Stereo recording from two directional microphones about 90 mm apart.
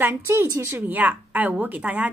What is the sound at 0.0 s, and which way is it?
A woman's voice, 25° right (ahead or behind).